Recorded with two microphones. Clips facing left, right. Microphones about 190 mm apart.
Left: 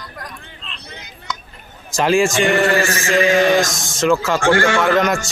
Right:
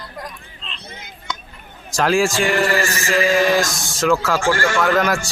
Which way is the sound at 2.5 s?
60° left (ahead or behind).